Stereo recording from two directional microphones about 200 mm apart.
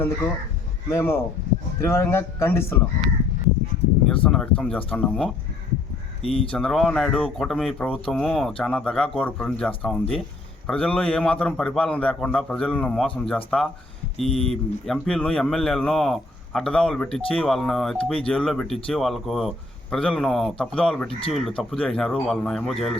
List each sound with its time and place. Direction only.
0.9 s speech: 10° left (ahead or behind)
4.1 s speech: 5° left (ahead or behind)
6.2 s speech: 25° left (ahead or behind)
6.5 s speech: 5° left (ahead or behind)